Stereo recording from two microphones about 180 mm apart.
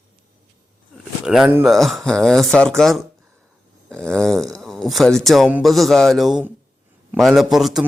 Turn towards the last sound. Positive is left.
turn(degrees=0)  # may be behind; listen again after turning